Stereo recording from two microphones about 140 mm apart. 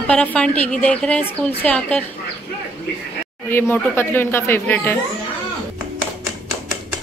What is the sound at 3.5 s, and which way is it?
A woman's voice, 15° left (ahead or behind).